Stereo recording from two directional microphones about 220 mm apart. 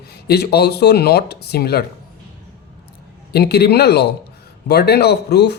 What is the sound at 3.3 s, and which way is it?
Speech, 45° left (ahead or behind).